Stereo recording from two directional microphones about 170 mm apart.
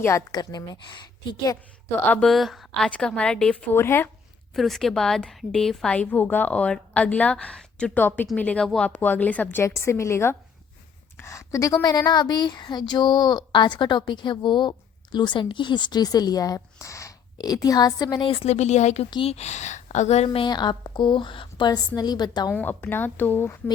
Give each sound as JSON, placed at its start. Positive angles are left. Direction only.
{"t": 0.0, "sound": "a woman's voice", "side_deg": 20}
{"t": 2.0, "sound": "a woman's voice", "side_deg": 0}
{"t": 4.5, "sound": "a woman's voice", "side_deg": 0}
{"t": 22.5, "sound": "a woman's voice", "side_deg": 10}